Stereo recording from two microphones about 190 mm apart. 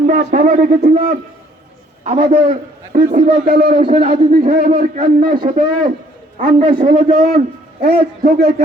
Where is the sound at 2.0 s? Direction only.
35° right (ahead or behind).